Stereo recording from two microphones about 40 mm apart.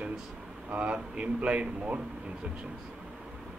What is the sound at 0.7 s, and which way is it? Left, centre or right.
Speech, right.